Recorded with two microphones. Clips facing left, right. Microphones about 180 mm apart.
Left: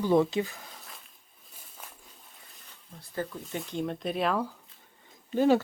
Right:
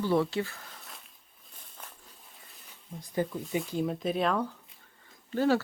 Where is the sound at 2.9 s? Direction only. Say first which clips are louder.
Right 4 dB; 15° right (ahead or behind).